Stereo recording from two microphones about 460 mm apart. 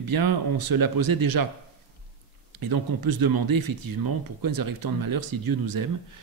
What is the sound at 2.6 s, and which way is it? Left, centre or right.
Speech, right.